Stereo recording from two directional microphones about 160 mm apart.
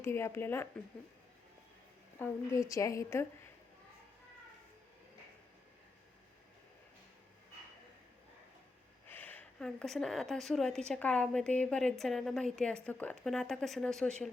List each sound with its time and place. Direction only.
0.0 s speech: 15° left (ahead or behind)
2.1 s a woman's voice: 15° left (ahead or behind)
9.0 s a woman's voice: 10° left (ahead or behind)